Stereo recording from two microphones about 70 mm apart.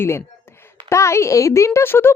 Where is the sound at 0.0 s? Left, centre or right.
Left.